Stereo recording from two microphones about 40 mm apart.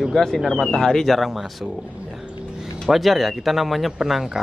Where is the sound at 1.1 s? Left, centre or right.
Centre.